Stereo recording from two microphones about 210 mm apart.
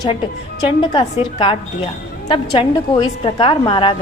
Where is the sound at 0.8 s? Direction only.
25° left (ahead or behind).